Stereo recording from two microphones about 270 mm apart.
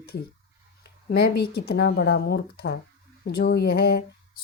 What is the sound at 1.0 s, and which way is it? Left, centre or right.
Speech, left.